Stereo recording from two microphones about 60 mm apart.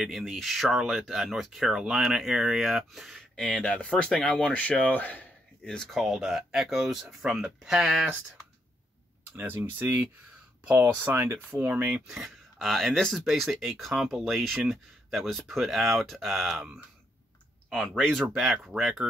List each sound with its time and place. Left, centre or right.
0.0 s speech: centre
3.2 s speech: centre; by 5.3 s left
5.6 s speech: centre
5.9 s speech: centre
9.3 s speech: right
11.1 s speech: right
11.9 s speech: centre
17.6 s speech: centre
18.3 s speech: centre